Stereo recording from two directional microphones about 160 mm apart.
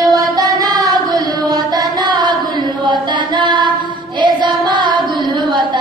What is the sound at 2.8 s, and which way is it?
Music, 30° right (ahead or behind).